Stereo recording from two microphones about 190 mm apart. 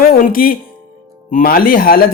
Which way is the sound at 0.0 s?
50° left (ahead or behind).